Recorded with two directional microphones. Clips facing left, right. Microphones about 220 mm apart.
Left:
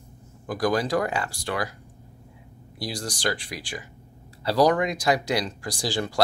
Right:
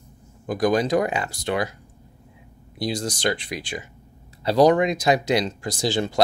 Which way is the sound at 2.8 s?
20° right (ahead or behind).